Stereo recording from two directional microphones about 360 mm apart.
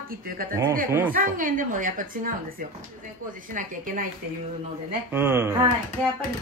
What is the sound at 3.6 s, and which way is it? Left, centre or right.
Speech, right.